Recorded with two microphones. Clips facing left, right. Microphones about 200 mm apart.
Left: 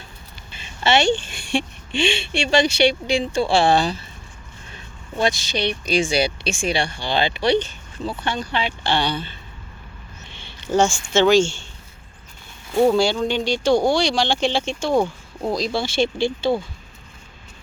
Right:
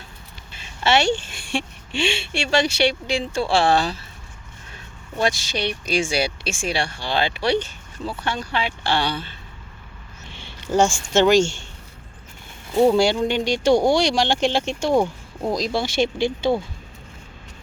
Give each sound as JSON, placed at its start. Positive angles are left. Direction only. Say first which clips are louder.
{"t": 0.6, "sound": "a woman's voice", "louder": "left 1 dB", "side_deg": -5}
{"t": 5.2, "sound": "speech", "louder": "left 1 dB", "side_deg": -10}
{"t": 10.3, "sound": "a sound", "louder": "even", "side_deg": -10}
{"t": 11.1, "sound": "speech", "louder": "left 1 dB", "side_deg": -15}
{"t": 12.8, "sound": "speech", "louder": "right 1 dB", "side_deg": -15}